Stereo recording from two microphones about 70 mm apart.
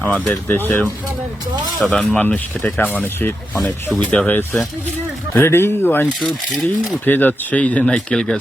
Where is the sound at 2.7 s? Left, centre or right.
Left.